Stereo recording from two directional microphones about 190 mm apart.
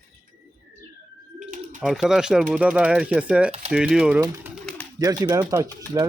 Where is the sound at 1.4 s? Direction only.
40° right (ahead or behind).